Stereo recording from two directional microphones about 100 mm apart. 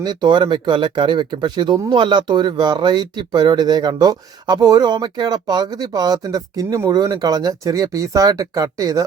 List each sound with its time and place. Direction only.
0.0 s speech: 45° right (ahead or behind)
6.9 s speech: 45° right (ahead or behind)